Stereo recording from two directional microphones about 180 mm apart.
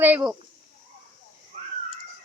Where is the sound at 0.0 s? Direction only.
5° right (ahead or behind).